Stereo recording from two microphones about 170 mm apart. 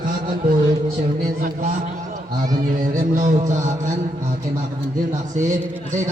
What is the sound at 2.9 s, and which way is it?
A man's voice, 50° right (ahead or behind).